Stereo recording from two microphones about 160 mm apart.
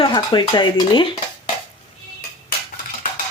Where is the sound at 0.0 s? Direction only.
30° left (ahead or behind).